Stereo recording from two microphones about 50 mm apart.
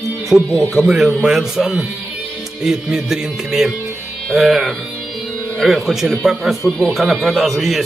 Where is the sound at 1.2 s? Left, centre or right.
Centre.